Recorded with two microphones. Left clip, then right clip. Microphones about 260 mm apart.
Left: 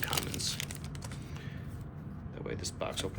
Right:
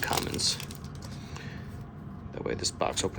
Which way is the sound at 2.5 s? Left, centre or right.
Centre.